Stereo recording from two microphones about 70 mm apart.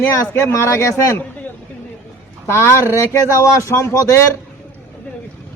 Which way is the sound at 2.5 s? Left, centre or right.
Left.